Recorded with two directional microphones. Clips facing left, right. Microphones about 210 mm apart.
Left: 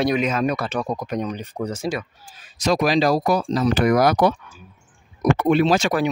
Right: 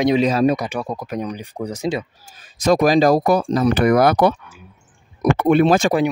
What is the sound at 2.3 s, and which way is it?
A man's voice, 50° right (ahead or behind).